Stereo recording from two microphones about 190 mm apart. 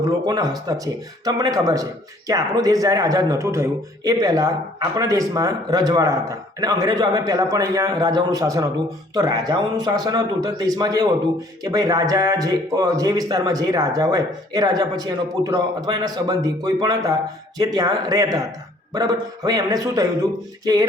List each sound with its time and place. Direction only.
0.0 s speech: 20° right (ahead or behind)